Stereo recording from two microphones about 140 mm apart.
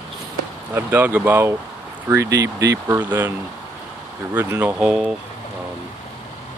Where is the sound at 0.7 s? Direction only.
15° right (ahead or behind).